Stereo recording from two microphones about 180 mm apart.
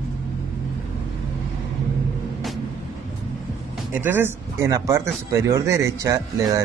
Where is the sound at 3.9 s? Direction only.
10° right (ahead or behind).